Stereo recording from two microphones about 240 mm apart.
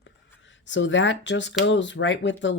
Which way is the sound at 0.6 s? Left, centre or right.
Left.